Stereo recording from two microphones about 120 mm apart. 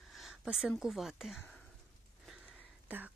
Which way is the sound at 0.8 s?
Centre (ahead or behind).